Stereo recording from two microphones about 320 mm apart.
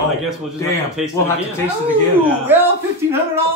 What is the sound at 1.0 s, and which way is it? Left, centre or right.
Speech, centre.